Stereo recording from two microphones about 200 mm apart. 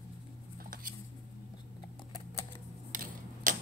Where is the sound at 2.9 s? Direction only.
40° right (ahead or behind).